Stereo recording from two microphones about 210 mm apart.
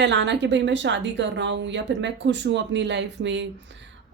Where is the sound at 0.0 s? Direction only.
55° right (ahead or behind).